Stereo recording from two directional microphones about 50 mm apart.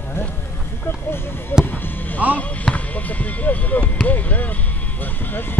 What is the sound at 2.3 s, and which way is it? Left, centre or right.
Speech, left.